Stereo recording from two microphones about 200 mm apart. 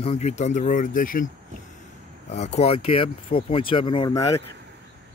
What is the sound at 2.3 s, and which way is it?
Speech, 35° left (ahead or behind).